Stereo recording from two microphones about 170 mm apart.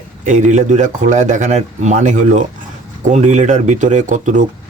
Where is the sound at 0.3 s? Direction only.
45° right (ahead or behind).